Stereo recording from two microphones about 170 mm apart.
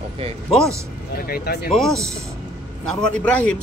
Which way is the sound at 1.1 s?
65° left (ahead or behind).